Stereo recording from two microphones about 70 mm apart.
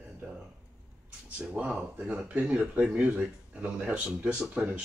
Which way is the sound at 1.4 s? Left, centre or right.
Centre.